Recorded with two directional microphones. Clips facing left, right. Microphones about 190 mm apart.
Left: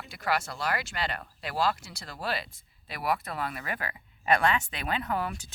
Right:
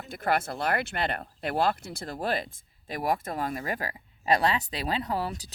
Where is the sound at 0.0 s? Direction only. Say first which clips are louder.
Right 3 dB; 55° right (ahead or behind).